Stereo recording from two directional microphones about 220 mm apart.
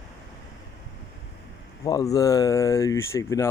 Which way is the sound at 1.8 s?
15° left (ahead or behind).